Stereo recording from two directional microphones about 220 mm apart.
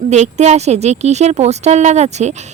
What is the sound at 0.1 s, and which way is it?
A woman's voice, 30° right (ahead or behind).